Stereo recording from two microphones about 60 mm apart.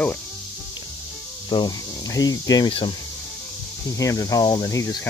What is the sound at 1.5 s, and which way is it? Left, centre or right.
Speech, left.